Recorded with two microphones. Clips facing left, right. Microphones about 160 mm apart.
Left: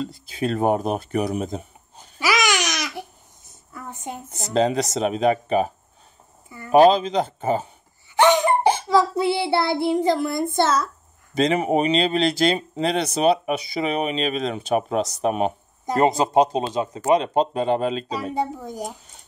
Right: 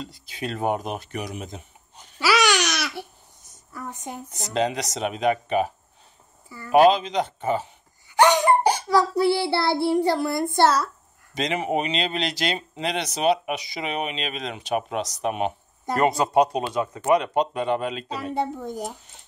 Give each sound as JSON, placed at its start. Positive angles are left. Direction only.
{"t": 0.0, "sound": "speech", "side_deg": 40}
{"t": 2.1, "sound": "babbling", "side_deg": 15}
{"t": 3.7, "sound": "speech", "side_deg": 25}
{"t": 6.8, "sound": "speech", "side_deg": 35}
{"t": 8.2, "sound": "child singing", "side_deg": 25}
{"t": 11.4, "sound": "speech", "side_deg": 40}
{"t": 16.0, "sound": "speech", "side_deg": 25}
{"t": 18.3, "sound": "speech", "side_deg": 10}